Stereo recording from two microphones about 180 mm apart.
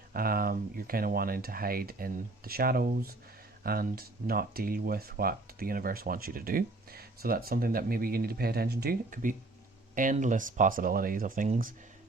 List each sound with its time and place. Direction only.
0.1 s speech: 55° right (ahead or behind)